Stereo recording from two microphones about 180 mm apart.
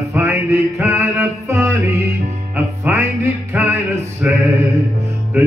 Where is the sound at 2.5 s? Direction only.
10° right (ahead or behind).